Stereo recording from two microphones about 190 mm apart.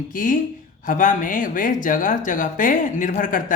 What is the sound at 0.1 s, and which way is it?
Speech, 45° left (ahead or behind).